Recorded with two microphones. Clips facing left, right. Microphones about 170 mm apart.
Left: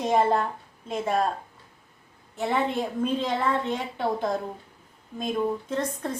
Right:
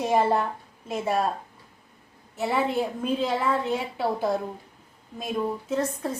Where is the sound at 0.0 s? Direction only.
5° right (ahead or behind).